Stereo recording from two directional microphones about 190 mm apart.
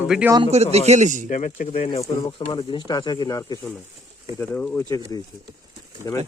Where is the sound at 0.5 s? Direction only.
35° right (ahead or behind).